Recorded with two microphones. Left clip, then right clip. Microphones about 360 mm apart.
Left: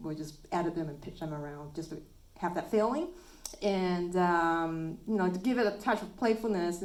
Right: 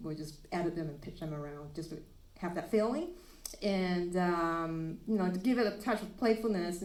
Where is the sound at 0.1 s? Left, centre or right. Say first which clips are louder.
Left 5 dB; left.